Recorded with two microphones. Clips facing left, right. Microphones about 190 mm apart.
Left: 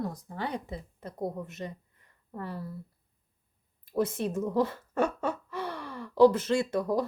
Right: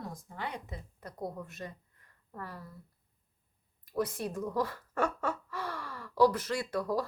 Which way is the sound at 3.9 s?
25° left (ahead or behind).